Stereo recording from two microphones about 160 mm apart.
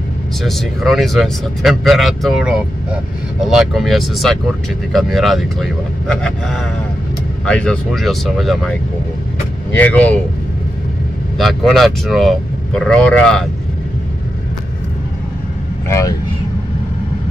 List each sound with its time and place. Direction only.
0.4 s speech: centre (ahead or behind)
11.3 s speech: centre (ahead or behind)
15.9 s speech: 20° left (ahead or behind)